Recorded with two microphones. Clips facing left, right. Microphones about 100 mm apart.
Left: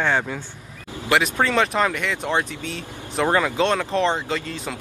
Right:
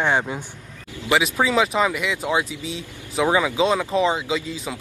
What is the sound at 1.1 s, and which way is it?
Speech, 5° right (ahead or behind).